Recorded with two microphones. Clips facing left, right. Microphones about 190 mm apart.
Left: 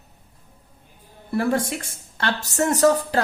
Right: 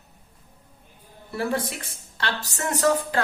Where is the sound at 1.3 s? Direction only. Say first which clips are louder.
Left 5 dB; 50° left (ahead or behind).